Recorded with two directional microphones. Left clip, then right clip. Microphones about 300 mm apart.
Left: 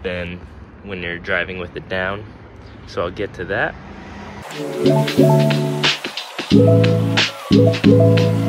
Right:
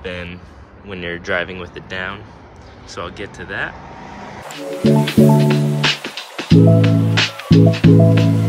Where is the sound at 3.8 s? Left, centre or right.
Right.